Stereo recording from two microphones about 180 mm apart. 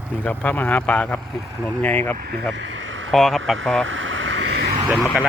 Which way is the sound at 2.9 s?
90° right.